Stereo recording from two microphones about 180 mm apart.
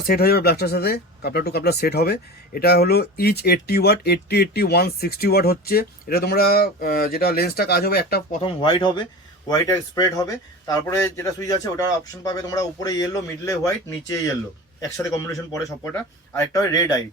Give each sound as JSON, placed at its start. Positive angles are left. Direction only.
{"t": 0.1, "sound": "speech", "side_deg": 60}
{"t": 8.4, "sound": "a man's voice", "side_deg": 25}